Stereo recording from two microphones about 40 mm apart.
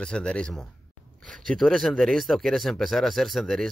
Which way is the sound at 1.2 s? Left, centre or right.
Centre.